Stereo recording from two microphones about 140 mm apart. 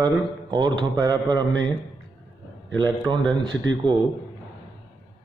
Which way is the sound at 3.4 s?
30° right (ahead or behind).